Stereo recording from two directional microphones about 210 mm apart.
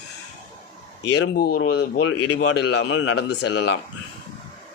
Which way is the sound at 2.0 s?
80° left.